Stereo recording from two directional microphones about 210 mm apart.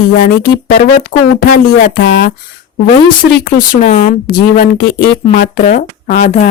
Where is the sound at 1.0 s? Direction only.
40° left (ahead or behind).